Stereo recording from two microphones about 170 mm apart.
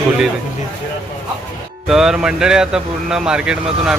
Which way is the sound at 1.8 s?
Centre (ahead or behind).